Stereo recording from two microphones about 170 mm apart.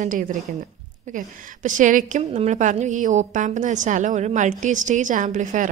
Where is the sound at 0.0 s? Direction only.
50° right (ahead or behind).